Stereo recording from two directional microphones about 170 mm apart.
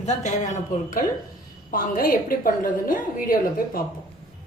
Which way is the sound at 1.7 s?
55° left (ahead or behind).